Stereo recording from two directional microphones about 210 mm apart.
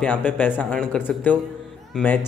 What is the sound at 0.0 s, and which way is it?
Speech, 5° left (ahead or behind).